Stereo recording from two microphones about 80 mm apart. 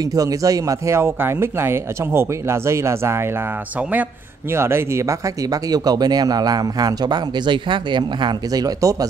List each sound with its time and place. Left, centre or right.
0.0 s speech: right
4.5 s speech: right